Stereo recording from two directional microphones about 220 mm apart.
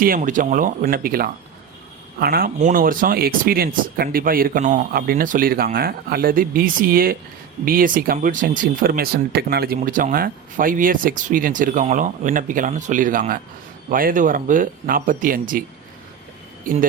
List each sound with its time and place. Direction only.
0.0 s speech: 40° right (ahead or behind)
16.7 s speech: 40° right (ahead or behind)